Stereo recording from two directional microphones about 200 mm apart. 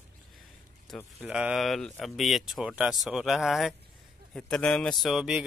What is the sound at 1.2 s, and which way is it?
Speech, 5° right (ahead or behind).